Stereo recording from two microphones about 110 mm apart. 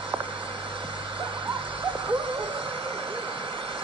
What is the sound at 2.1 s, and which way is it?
Owl, 55° right (ahead or behind).